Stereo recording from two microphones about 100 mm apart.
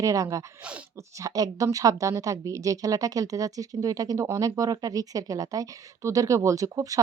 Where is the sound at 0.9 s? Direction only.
30° right (ahead or behind).